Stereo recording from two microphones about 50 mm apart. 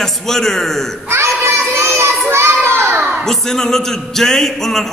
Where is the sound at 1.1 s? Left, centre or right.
Right.